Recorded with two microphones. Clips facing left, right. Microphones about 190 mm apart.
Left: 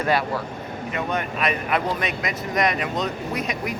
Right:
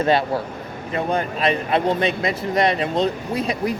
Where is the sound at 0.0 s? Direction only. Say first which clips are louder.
Right 4 dB; 25° right (ahead or behind).